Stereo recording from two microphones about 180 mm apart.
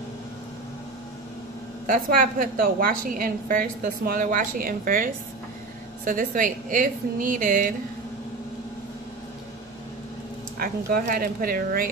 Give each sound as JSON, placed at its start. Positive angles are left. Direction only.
{"t": 1.9, "sound": "a woman's voice", "side_deg": -50}
{"t": 10.6, "sound": "a woman's voice", "side_deg": -55}